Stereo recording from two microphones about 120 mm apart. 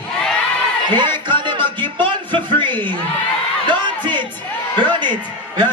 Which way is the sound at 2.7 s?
15° left (ahead or behind).